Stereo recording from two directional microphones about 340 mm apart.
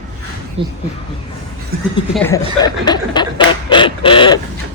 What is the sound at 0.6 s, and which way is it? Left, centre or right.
Speech, centre.